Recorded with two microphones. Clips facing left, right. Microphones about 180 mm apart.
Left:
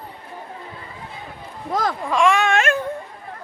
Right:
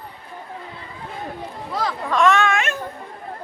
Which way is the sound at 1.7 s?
45° left (ahead or behind).